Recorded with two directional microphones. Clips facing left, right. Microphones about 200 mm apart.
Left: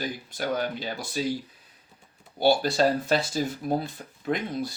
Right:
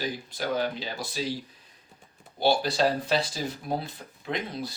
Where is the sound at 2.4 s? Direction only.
45° left (ahead or behind).